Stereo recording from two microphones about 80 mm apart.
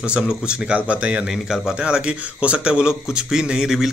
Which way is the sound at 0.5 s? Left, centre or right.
Centre.